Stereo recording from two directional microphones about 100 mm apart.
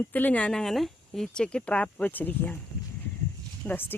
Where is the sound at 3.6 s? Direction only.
20° left (ahead or behind).